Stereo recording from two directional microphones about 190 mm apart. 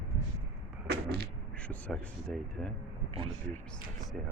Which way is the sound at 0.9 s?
55° right (ahead or behind).